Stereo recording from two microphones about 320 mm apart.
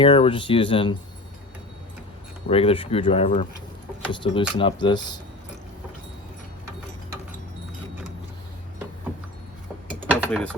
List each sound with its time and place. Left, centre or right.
0.0 s speech: centre
2.5 s speech: centre
10.1 s a sound: centre